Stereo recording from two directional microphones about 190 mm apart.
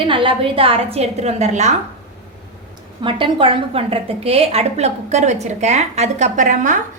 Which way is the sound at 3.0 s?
25° right (ahead or behind).